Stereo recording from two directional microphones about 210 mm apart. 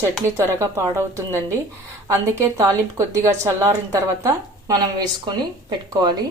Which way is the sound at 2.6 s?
15° right (ahead or behind).